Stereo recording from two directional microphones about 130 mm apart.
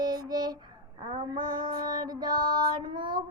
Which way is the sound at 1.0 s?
35° right (ahead or behind).